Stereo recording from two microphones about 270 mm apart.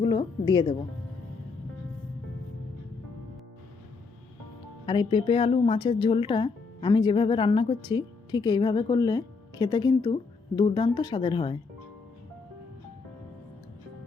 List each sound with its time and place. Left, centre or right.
0.0 s a woman's voice: centre
4.9 s speech: centre